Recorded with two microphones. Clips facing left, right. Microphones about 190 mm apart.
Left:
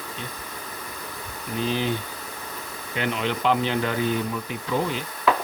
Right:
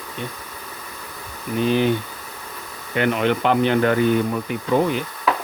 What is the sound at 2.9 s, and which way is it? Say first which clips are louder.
Speech: right 7 dB; 55° right (ahead or behind).